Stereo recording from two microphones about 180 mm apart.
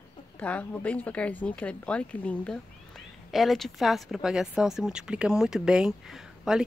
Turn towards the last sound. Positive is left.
turn(degrees=0)  # may be behind; listen again after turning